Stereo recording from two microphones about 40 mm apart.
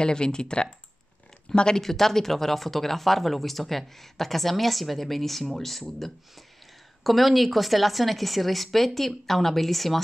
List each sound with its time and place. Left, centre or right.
0.0 s speech: left
1.8 s speech: centre